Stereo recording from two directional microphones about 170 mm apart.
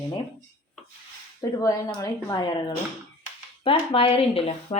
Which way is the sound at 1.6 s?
20° left (ahead or behind).